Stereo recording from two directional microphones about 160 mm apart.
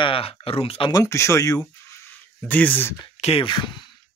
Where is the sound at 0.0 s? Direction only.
35° left (ahead or behind).